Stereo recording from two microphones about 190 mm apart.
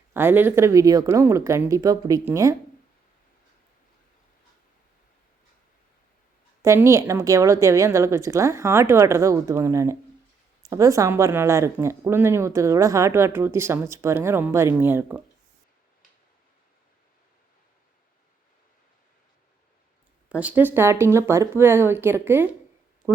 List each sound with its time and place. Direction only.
0.1 s speech: 10° right (ahead or behind)
6.6 s speech: 15° right (ahead or behind)
20.3 s speech: 5° right (ahead or behind)